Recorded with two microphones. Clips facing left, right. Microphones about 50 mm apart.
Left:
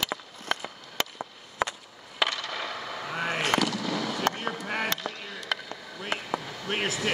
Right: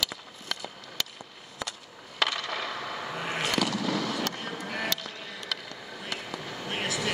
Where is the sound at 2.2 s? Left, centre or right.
Centre.